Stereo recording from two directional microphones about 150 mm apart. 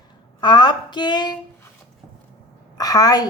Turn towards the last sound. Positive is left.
turn(degrees=25)  # may be behind; listen again after turning